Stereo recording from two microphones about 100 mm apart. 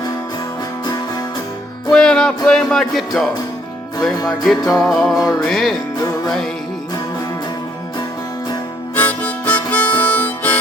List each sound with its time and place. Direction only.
1.9 s music: 5° left (ahead or behind)
4.7 s music: centre (ahead or behind)
9.0 s harmonica: 15° left (ahead or behind)